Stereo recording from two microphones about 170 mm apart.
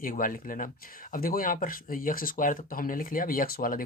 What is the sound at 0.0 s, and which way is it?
Speech, 55° left (ahead or behind).